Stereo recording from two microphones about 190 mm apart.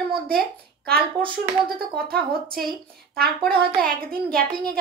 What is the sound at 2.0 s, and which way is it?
Speech, 50° right (ahead or behind).